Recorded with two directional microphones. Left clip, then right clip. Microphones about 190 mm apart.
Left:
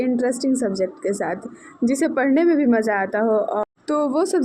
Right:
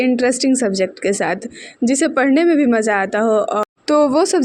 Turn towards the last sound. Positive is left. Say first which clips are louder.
# right 6 dB
turn(degrees=-35)  # may be behind; listen again after turning